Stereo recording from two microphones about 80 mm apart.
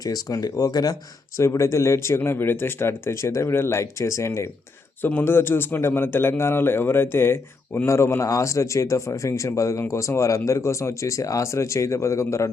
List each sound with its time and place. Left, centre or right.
0.0 s speech: left
1.4 s a man's voice: left
5.0 s a man's voice: left